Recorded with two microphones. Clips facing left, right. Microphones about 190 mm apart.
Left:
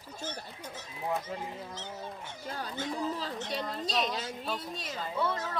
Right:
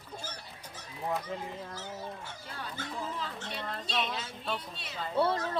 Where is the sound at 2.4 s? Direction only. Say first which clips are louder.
Left 6 dB; 40° left (ahead or behind).